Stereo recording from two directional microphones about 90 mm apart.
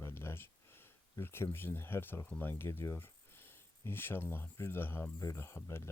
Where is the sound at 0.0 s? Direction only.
30° left (ahead or behind).